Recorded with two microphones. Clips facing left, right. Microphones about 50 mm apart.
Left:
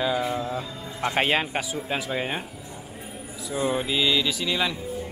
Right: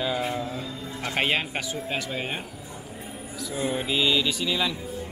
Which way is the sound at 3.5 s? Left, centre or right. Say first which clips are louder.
Left 2 dB; centre.